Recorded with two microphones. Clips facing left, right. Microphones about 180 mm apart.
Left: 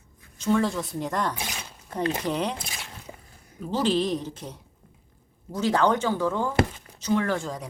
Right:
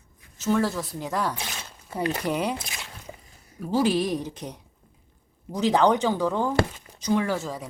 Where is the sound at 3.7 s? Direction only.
10° right (ahead or behind).